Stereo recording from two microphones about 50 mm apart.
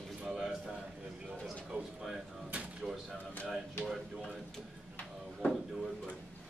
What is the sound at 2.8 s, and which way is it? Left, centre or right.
Speech, centre.